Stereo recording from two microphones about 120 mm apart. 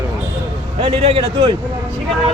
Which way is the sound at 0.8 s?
55° right (ahead or behind).